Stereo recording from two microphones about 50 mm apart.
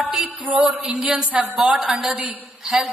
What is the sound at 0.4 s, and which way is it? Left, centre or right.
Speech, right.